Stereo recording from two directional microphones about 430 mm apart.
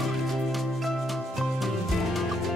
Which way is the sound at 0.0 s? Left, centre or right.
Centre.